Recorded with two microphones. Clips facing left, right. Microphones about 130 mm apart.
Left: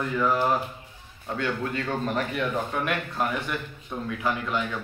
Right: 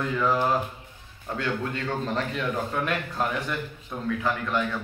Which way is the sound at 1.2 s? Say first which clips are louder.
Even; 10° left (ahead or behind).